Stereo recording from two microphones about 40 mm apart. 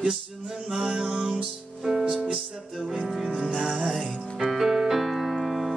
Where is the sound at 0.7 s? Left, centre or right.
Right.